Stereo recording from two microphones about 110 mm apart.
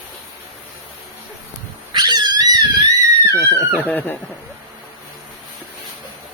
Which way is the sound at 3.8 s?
15° left (ahead or behind).